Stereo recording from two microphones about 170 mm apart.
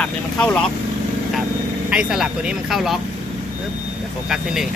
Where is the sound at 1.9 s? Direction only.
5° right (ahead or behind).